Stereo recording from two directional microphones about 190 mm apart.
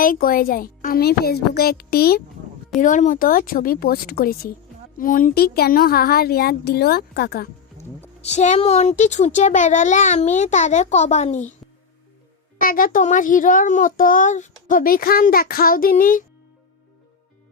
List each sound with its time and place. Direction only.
0.0 s a child's voice: 45° left (ahead or behind)
2.8 s a child's voice: 40° left (ahead or behind)
8.2 s a child's voice: 35° left (ahead or behind)
12.5 s a child's voice: 50° left (ahead or behind)